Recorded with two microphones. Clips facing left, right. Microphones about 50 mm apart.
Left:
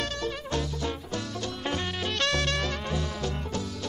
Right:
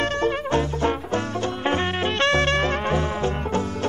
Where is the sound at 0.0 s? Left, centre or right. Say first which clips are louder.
Right 9 dB; right.